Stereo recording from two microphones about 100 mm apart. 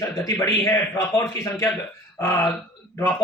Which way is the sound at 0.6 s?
25° left (ahead or behind).